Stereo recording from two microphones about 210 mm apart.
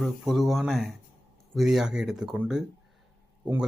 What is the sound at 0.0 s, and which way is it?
Speech, centre (ahead or behind).